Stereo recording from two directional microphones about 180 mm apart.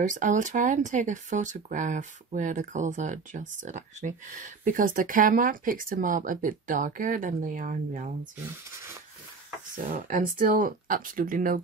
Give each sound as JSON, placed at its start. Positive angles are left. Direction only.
{"t": 0.1, "sound": "speech", "side_deg": -45}
{"t": 9.9, "sound": "speech", "side_deg": -50}